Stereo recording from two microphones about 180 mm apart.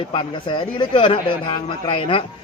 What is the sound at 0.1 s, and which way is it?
A man's voice, 25° left (ahead or behind).